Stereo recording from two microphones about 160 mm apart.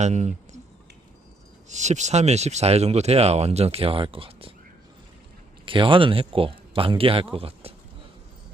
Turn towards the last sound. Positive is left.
turn(degrees=-35)  # may be behind; listen again after turning